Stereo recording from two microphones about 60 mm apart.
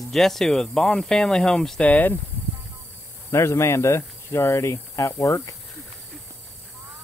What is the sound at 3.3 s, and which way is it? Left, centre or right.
Speech, left.